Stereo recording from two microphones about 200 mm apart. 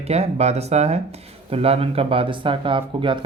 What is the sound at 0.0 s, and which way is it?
Speech, 30° right (ahead or behind).